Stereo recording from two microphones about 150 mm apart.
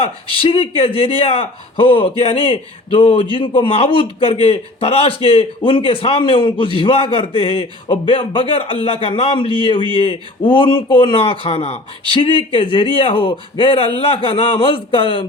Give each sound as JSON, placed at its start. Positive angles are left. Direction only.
{"t": 0.3, "sound": "speech", "side_deg": 35}